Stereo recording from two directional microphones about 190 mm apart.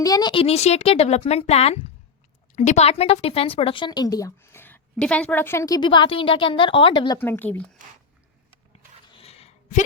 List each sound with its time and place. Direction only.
0.0 s a woman's voice: 20° left (ahead or behind)
7.2 s speech: 10° left (ahead or behind)
9.1 s a sound: 30° left (ahead or behind)